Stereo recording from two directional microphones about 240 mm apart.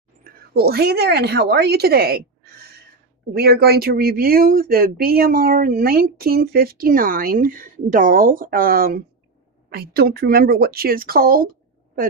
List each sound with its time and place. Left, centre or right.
0.2 s a woman's voice: right